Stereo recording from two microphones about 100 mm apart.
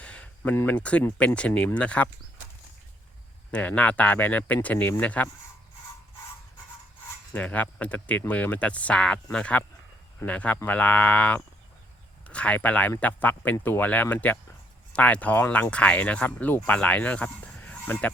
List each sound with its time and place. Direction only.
0.0 s a sound: 15° left (ahead or behind)
0.5 s speech: 20° left (ahead or behind)
3.5 s speech: 15° left (ahead or behind)
7.3 s speech: 15° left (ahead or behind)